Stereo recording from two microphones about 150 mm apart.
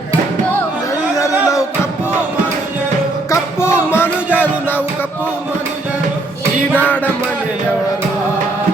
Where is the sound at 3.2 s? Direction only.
15° left (ahead or behind).